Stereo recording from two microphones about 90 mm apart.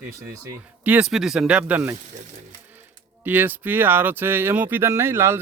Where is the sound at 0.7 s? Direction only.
15° right (ahead or behind).